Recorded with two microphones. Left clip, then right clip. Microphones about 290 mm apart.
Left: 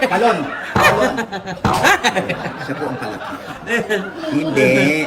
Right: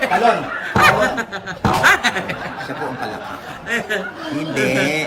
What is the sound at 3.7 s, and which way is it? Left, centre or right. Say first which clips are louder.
Speech: left 2 dB; centre.